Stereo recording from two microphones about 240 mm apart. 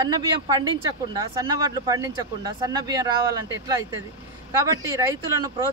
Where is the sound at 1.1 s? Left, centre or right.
Centre.